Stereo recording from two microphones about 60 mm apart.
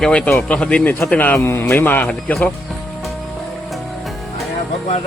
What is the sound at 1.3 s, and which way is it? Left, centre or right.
Speech, left.